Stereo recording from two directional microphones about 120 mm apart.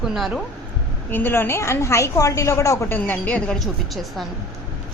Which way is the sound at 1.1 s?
20° left (ahead or behind).